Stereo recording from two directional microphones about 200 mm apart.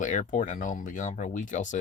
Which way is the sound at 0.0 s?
40° left (ahead or behind).